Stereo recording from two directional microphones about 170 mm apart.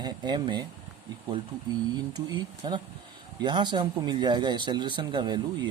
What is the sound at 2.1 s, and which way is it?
Speech, 25° right (ahead or behind).